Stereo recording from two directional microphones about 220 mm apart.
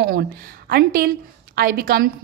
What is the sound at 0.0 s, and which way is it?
A woman's voice, 45° right (ahead or behind).